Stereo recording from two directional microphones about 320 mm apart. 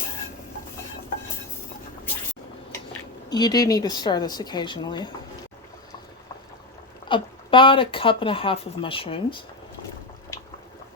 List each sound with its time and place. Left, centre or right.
3.2 s speech: centre
7.1 s speech: centre